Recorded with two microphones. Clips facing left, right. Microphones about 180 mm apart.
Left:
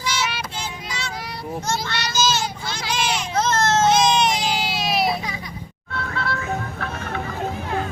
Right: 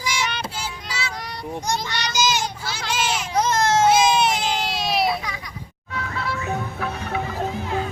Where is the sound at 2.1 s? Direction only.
15° right (ahead or behind).